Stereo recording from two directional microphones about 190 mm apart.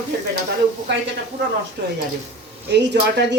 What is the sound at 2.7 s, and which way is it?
Speech, 65° right (ahead or behind).